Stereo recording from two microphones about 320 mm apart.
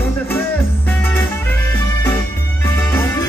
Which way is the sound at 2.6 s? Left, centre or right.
Centre.